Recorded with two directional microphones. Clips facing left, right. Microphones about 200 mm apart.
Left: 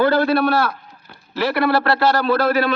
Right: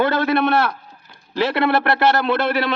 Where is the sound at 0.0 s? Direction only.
20° right (ahead or behind).